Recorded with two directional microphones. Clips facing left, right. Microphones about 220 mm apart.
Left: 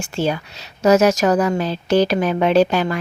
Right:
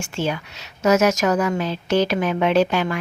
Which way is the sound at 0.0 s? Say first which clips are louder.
Left 3 dB; 35° left (ahead or behind).